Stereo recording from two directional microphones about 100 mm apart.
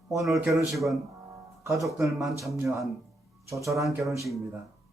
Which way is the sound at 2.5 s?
30° right (ahead or behind).